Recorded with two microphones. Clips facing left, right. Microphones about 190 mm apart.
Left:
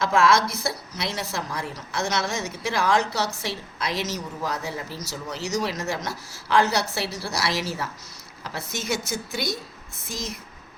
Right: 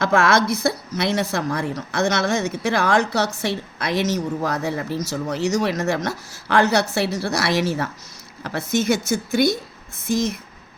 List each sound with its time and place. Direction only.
0.0 s a woman's voice: 55° right (ahead or behind)